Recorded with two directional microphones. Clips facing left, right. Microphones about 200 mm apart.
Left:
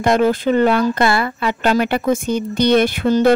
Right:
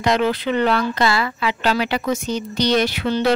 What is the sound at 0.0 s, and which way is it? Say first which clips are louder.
Speech: left 4 dB; 50° left (ahead or behind).